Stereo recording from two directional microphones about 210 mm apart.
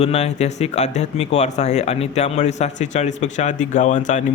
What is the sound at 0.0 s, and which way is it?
A man's voice, 30° left (ahead or behind).